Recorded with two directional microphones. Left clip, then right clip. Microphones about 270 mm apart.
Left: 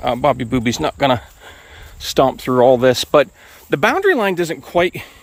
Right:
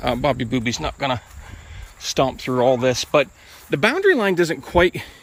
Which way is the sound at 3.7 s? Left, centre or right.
Centre.